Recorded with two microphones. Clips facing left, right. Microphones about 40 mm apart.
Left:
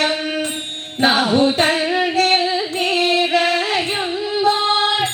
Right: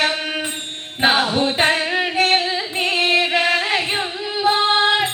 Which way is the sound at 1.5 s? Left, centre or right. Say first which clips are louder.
Left 1 dB; centre.